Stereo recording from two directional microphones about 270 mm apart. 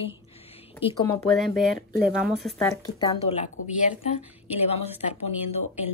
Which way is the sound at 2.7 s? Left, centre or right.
Centre.